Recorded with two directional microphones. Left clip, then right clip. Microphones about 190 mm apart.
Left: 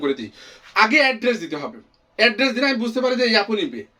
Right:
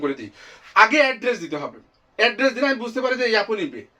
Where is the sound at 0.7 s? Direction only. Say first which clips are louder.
Right 1 dB; 25° left (ahead or behind).